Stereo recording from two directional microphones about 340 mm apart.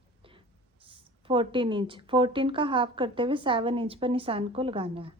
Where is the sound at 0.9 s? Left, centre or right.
Centre.